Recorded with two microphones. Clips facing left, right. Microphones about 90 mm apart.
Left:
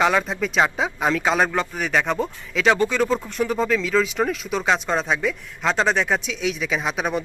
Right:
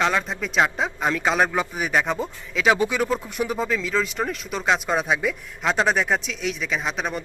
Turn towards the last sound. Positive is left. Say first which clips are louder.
# left 3 dB
turn(degrees=5)  # may be behind; listen again after turning